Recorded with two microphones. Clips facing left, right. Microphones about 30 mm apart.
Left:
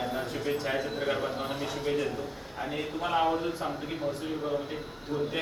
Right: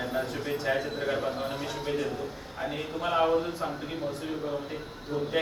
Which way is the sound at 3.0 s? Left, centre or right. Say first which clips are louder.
Right 1 dB; centre.